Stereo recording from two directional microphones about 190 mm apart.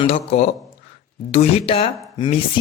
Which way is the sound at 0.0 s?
35° left (ahead or behind).